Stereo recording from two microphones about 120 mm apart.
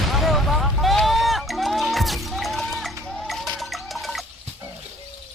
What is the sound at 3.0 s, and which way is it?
Water, 5° left (ahead or behind).